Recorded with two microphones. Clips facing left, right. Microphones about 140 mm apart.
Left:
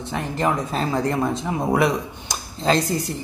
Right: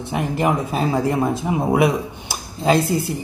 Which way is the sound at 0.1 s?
15° right (ahead or behind).